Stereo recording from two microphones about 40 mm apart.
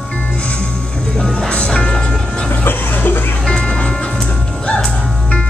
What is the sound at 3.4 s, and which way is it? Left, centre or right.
Music, left.